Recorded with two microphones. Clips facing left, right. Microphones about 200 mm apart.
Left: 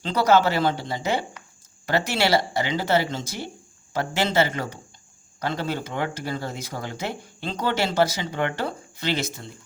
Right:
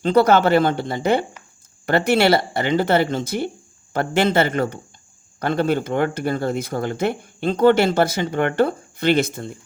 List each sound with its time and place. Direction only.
0.0 s speech: 55° right (ahead or behind)